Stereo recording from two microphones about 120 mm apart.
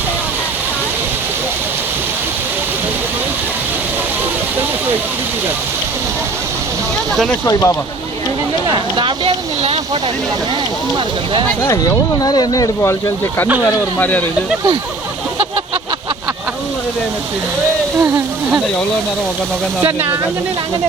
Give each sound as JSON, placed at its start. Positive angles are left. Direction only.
{"t": 7.4, "sound": "speech", "side_deg": 25}
{"t": 8.6, "sound": "speech", "side_deg": -40}
{"t": 12.2, "sound": "speech", "side_deg": 30}
{"t": 14.0, "sound": "speech", "side_deg": 15}